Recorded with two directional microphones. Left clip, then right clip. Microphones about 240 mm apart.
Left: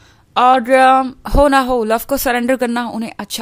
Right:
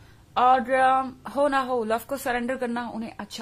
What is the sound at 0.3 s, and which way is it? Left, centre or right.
A woman's voice, left.